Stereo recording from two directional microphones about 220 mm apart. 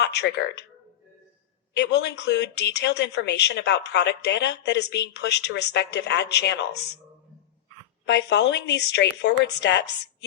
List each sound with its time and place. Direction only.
0.0 s speech: 50° left (ahead or behind)
1.7 s speech: 50° left (ahead or behind)
8.0 s speech: 50° left (ahead or behind)